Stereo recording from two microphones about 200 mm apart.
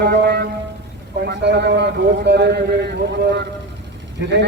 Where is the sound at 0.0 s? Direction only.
55° right (ahead or behind).